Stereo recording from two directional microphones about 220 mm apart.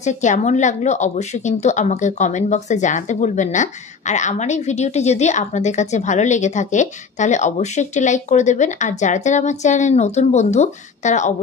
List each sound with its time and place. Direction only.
0.0 s a woman's voice: 30° left (ahead or behind)